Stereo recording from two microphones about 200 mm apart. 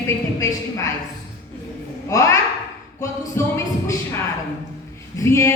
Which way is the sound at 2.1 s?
15° left (ahead or behind).